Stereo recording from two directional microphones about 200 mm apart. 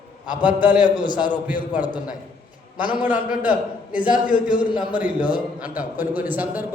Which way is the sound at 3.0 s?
5° right (ahead or behind).